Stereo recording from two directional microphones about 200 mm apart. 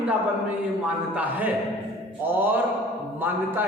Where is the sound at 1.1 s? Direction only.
10° right (ahead or behind).